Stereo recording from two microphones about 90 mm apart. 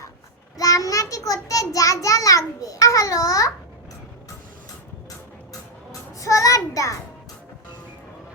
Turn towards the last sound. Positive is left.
turn(degrees=40)  # may be behind; listen again after turning